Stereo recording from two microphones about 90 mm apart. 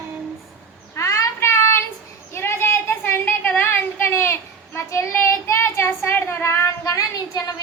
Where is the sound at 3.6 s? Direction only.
25° left (ahead or behind).